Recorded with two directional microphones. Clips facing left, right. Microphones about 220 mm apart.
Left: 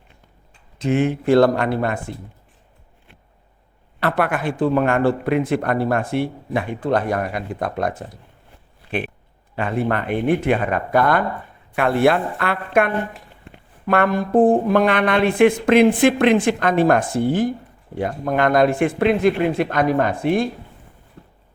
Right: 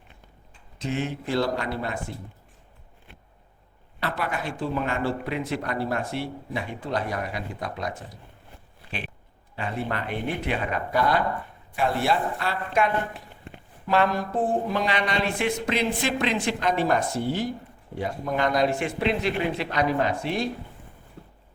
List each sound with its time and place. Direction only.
0.8 s speech: 55° left (ahead or behind)
4.0 s speech: 55° left (ahead or behind)
9.6 s speech: 55° left (ahead or behind)